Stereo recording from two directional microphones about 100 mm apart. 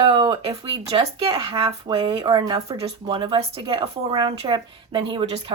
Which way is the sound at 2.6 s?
85° right.